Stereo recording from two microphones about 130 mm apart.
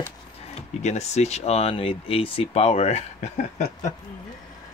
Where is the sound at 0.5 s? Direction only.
60° left (ahead or behind).